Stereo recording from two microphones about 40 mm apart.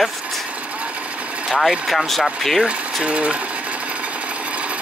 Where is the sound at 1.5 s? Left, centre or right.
Centre.